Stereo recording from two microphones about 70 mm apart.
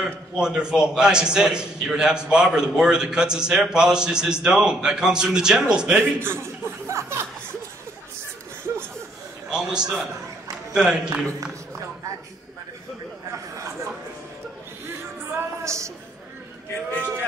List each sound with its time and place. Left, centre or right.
0.0 s a man's voice: centre
6.1 s chuckle: right
9.5 s a man's voice: centre
14.9 s music: right